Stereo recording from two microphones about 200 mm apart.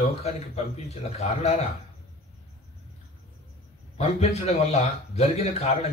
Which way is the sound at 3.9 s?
30° left (ahead or behind).